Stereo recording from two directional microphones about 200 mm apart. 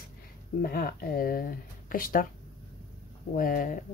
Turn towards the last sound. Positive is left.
turn(degrees=45)  # may be behind; listen again after turning